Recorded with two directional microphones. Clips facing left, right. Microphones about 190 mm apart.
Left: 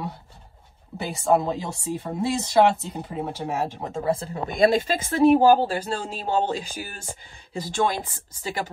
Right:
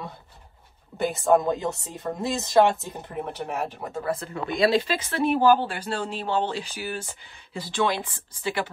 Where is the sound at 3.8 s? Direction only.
25° left (ahead or behind).